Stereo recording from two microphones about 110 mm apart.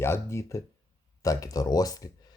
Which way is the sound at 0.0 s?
25° left (ahead or behind).